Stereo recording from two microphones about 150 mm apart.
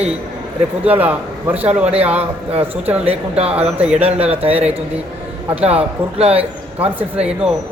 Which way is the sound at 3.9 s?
40° right (ahead or behind).